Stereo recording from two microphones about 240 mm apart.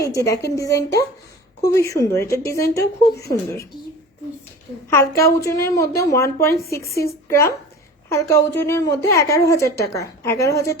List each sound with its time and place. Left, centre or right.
0.0 s a woman's voice: centre
4.9 s a woman's voice: centre